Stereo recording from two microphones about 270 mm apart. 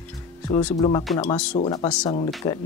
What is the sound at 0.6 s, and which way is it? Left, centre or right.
Speech, centre.